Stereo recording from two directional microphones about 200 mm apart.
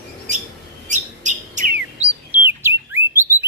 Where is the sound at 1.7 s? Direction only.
10° right (ahead or behind).